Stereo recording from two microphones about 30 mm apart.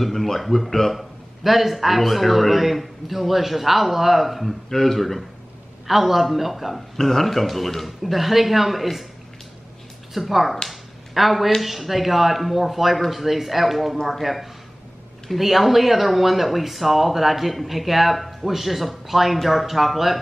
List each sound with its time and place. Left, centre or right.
0.0 s speech: centre
0.9 s a man's voice: centre
5.9 s a man's voice: centre
7.0 s a man's voice: centre
10.1 s a man's voice: centre
10.7 s a sound: centre
11.6 s a man's voice: centre